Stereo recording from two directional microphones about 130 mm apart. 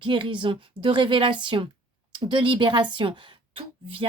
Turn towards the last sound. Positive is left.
turn(degrees=-45)  # may be behind; listen again after turning